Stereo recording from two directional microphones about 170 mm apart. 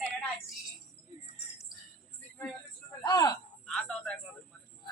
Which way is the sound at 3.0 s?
20° left (ahead or behind).